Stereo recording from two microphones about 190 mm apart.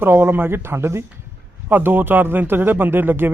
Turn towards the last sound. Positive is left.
turn(degrees=-10)  # may be behind; listen again after turning